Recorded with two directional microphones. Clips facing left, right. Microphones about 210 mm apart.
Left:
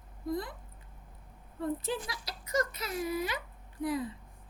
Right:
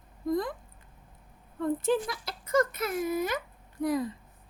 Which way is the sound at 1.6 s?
50° right (ahead or behind).